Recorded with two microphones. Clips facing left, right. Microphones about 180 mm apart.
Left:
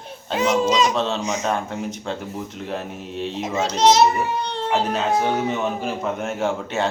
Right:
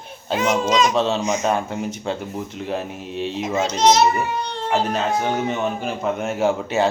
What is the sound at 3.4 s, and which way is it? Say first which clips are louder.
Speech: even; 35° left (ahead or behind).